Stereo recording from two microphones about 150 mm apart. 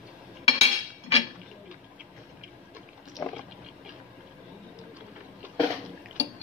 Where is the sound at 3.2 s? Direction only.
15° left (ahead or behind).